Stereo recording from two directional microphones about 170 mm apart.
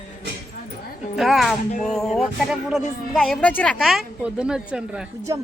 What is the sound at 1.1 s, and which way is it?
A woman's voice, centre (ahead or behind).